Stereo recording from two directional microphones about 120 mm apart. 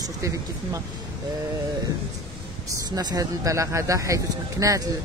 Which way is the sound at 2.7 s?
30° right (ahead or behind).